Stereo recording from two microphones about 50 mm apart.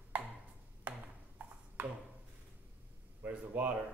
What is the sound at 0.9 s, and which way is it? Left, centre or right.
Ping, right.